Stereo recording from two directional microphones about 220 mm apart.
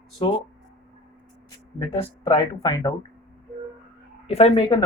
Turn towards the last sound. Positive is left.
turn(degrees=30)  # may be behind; listen again after turning